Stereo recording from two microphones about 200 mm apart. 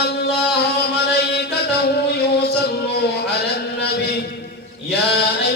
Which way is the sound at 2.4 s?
55° left (ahead or behind).